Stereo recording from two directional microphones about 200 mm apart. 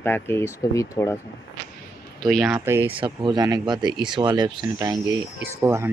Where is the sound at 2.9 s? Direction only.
25° right (ahead or behind).